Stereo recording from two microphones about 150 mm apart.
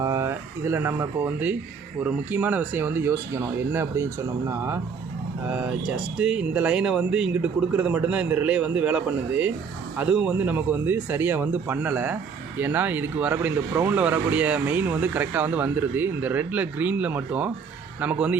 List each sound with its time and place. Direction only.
0.0 s speech: 20° right (ahead or behind)